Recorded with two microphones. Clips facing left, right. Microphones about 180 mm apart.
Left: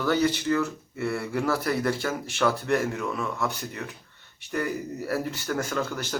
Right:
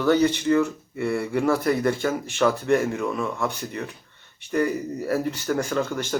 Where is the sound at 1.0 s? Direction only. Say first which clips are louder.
Right 4 dB; centre (ahead or behind).